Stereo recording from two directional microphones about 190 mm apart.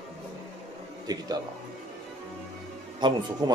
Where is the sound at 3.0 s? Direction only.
25° right (ahead or behind).